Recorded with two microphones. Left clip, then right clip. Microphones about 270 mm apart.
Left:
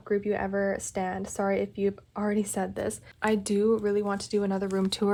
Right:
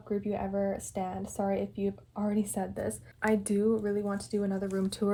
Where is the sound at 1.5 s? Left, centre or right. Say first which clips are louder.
Left 5 dB; centre.